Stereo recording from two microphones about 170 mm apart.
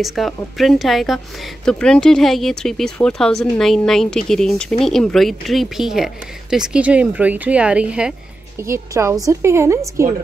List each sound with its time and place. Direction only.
0.0 s a woman's voice: centre (ahead or behind); by 10.1 s 15° right (ahead or behind)